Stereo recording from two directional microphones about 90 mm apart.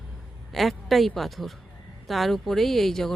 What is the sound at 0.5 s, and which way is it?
Speech, centre (ahead or behind).